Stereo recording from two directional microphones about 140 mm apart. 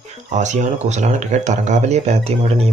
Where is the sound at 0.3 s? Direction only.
60° right (ahead or behind).